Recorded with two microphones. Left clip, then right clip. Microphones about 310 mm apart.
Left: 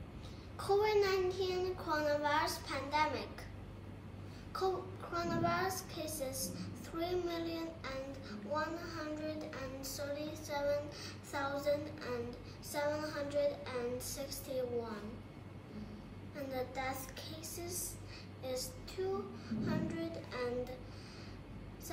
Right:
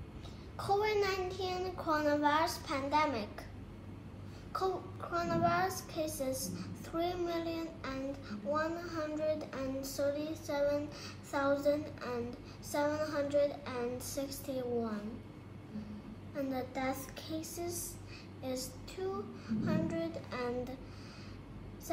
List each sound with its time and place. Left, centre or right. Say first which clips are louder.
0.6 s a woman's voice: even; centre
4.5 s a child's voice: right 1 dB; centre
16.3 s a child's voice: right 3 dB; centre